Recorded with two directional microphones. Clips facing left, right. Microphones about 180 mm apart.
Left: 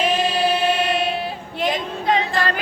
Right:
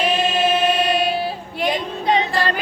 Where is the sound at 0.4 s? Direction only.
30° left (ahead or behind).